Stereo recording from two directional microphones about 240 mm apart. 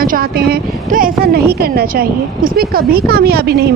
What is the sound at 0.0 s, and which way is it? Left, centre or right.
A woman's voice, right.